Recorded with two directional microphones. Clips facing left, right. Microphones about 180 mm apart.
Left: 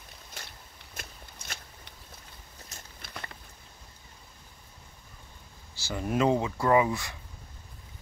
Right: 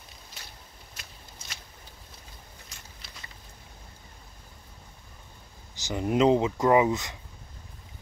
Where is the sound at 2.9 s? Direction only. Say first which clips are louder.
Left 11 dB; 55° left (ahead or behind).